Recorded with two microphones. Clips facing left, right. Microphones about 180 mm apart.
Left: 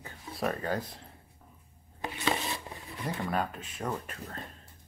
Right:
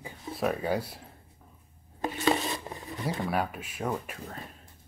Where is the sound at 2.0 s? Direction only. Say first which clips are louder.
Right 5 dB; 40° right (ahead or behind).